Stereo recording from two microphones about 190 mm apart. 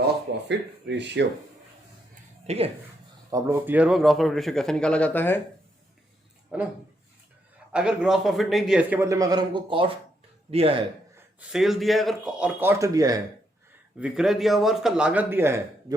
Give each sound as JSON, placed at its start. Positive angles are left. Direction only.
{"t": 0.4, "sound": "speech", "side_deg": -65}
{"t": 2.5, "sound": "speech", "side_deg": -35}
{"t": 3.2, "sound": "a man's voice", "side_deg": -15}
{"t": 6.5, "sound": "speech", "side_deg": -5}
{"t": 7.7, "sound": "a man's voice", "side_deg": -5}
{"t": 11.3, "sound": "a man's voice", "side_deg": 0}
{"t": 14.0, "sound": "a man's voice", "side_deg": -5}